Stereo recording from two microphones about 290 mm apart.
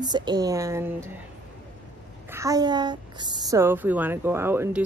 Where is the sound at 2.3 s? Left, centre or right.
Centre.